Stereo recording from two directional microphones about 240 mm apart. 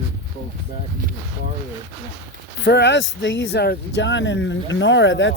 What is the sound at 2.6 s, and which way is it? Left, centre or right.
Speech, left.